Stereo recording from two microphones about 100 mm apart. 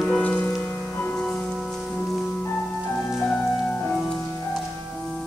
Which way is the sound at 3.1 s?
Centre (ahead or behind).